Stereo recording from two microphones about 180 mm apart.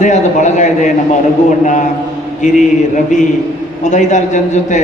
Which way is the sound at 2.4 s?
45° left (ahead or behind).